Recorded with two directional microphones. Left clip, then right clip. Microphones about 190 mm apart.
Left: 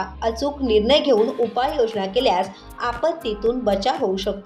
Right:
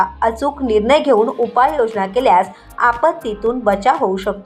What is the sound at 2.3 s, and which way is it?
Speech, 15° right (ahead or behind).